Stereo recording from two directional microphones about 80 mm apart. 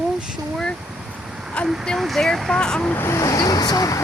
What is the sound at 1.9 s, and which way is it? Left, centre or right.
Speech, centre.